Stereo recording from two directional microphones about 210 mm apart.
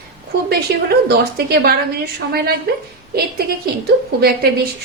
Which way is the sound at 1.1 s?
50° right (ahead or behind).